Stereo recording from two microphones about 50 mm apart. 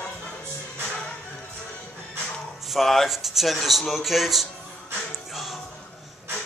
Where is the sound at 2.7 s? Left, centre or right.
Centre.